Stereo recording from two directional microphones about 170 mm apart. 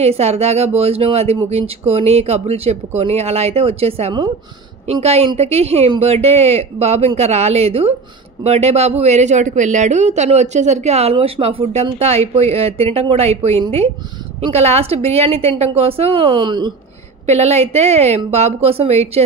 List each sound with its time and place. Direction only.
0.0 s speech: 40° right (ahead or behind)
17.3 s speech: 40° right (ahead or behind)